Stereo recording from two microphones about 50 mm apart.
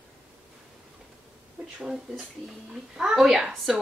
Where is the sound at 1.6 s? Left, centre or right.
Right.